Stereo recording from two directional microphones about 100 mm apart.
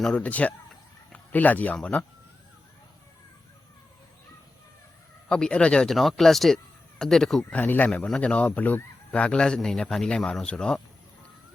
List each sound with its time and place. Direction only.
0.0 s speech: 10° left (ahead or behind)
5.3 s speech: 10° left (ahead or behind)
7.6 s speech: 15° left (ahead or behind)